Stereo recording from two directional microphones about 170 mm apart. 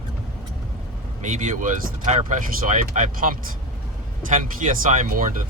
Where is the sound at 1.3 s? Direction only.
50° right (ahead or behind).